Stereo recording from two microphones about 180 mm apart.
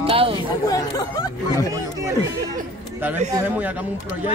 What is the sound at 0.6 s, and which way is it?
Speech, 20° left (ahead or behind).